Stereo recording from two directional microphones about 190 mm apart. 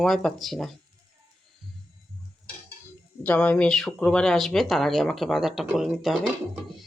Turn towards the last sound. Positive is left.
turn(degrees=0)  # may be behind; listen again after turning